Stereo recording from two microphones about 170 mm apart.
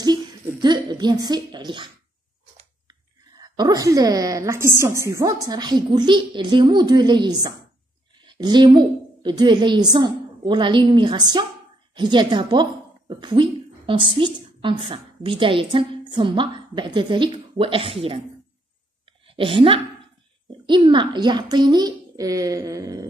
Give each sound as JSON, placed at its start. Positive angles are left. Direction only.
{"t": 0.0, "sound": "a sound", "side_deg": -25}
{"t": 3.3, "sound": "a woman's voice", "side_deg": -20}
{"t": 19.2, "sound": "a woman's voice", "side_deg": -30}